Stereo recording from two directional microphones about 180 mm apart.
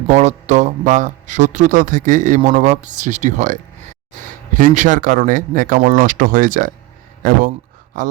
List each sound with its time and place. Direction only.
0.1 s speech: 40° right (ahead or behind)